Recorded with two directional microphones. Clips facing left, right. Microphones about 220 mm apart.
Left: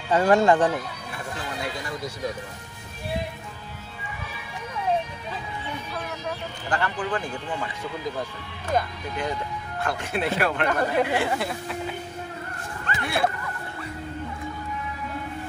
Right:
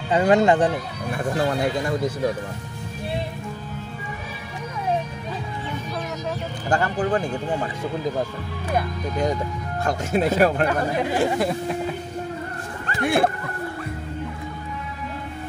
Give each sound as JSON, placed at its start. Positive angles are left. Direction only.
{"t": 0.1, "sound": "speech", "side_deg": -20}
{"t": 1.1, "sound": "speech", "side_deg": -55}
{"t": 6.7, "sound": "speech", "side_deg": -45}
{"t": 9.8, "sound": "speech", "side_deg": -40}
{"t": 13.0, "sound": "speech", "side_deg": -50}